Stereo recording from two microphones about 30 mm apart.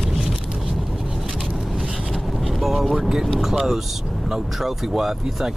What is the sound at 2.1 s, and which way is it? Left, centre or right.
Vehicle, centre.